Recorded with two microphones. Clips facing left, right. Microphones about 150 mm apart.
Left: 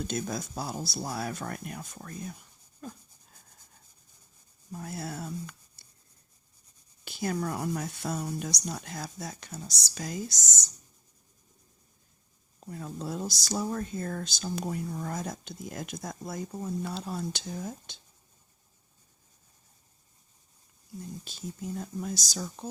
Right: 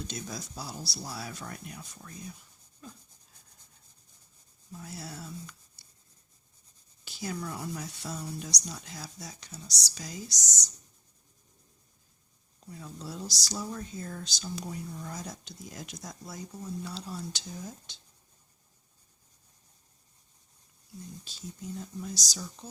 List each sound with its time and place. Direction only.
0.1 s speech: 50° left (ahead or behind)
2.8 s a sound: 50° left (ahead or behind)
4.7 s a sound: 55° left (ahead or behind)
7.0 s speech: 55° left (ahead or behind)
12.5 s speech: 50° left (ahead or behind)
21.2 s speech: 55° left (ahead or behind)